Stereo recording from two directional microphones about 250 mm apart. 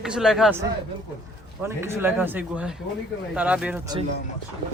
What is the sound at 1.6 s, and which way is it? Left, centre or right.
Speech, centre.